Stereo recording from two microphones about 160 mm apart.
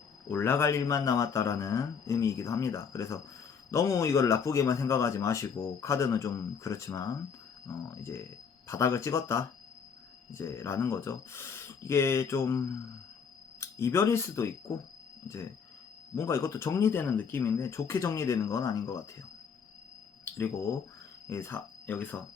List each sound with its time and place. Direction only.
0.3 s speech: 15° left (ahead or behind)
16.1 s speech: 15° left (ahead or behind)
21.2 s speech: 15° left (ahead or behind)